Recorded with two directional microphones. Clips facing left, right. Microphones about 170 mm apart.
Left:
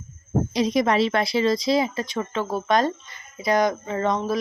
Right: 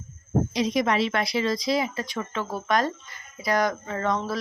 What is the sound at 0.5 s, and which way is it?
Speech, 35° left (ahead or behind).